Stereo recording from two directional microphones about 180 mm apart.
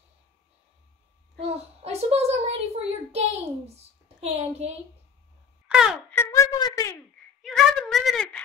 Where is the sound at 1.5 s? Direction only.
35° right (ahead or behind).